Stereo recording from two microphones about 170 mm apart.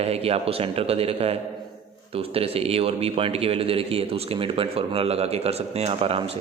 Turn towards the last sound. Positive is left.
turn(degrees=-35)  # may be behind; listen again after turning